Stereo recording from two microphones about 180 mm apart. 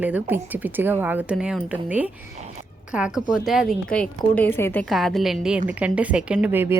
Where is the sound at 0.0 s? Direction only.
10° right (ahead or behind); by 4.9 s 10° left (ahead or behind).